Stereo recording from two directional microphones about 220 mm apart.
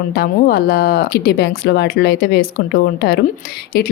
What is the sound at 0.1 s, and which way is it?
Speech, 45° left (ahead or behind).